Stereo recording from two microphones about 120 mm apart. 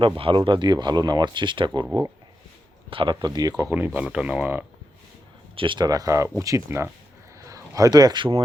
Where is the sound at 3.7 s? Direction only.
15° right (ahead or behind).